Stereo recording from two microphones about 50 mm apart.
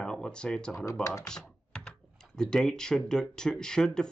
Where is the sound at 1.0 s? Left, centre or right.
Left.